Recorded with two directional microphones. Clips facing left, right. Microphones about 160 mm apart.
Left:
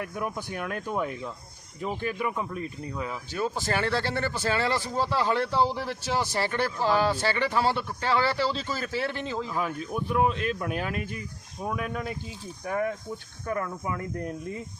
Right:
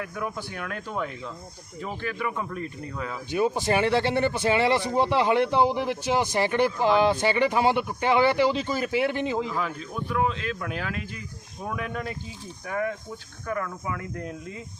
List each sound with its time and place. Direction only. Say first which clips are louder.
0.3 s speech: left 1 dB; 15° left (ahead or behind)
3.3 s speech: right 6 dB; 15° right (ahead or behind)
9.5 s speech: left 1 dB; 15° left (ahead or behind)